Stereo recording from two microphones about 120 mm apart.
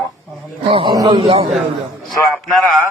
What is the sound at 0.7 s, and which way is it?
Speech, 50° right (ahead or behind).